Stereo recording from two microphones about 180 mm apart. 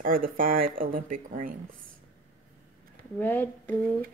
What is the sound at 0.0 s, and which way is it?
Speech, 50° right (ahead or behind).